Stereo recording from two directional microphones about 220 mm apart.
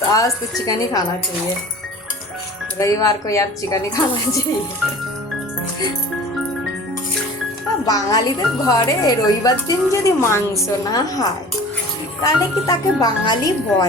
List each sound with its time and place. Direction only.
0.1 s speech: 15° left (ahead or behind)
2.7 s speech: 15° left (ahead or behind)
7.9 s speech: 15° left (ahead or behind)